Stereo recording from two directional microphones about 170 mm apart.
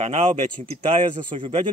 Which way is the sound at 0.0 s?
40° right (ahead or behind).